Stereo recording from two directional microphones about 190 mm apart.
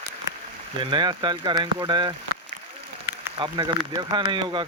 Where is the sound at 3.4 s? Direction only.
25° right (ahead or behind).